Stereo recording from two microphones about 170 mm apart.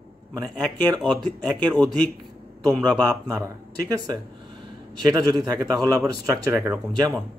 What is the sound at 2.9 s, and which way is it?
Speech, 20° right (ahead or behind).